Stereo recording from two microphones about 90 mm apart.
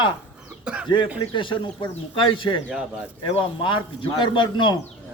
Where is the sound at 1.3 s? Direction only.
65° left (ahead or behind).